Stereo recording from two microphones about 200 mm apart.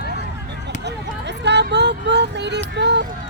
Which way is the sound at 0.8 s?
60° right (ahead or behind).